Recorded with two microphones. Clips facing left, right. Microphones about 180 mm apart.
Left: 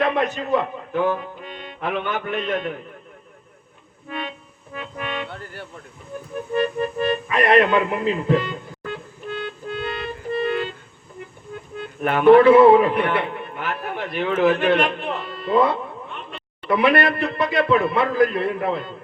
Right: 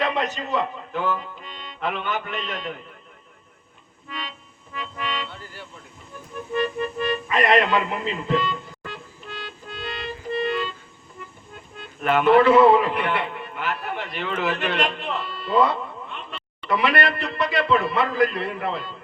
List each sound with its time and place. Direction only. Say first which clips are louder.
0.0 s speech: left 4 dB; 55° left (ahead or behind)
4.1 s speech: left 6 dB; 55° left (ahead or behind)
6.5 s music: left 3 dB; 55° left (ahead or behind)
11.8 s a man's voice: left 1 dB; 55° left (ahead or behind)